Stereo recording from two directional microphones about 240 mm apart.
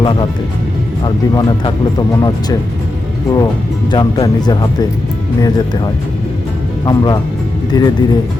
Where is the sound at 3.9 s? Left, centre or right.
Centre.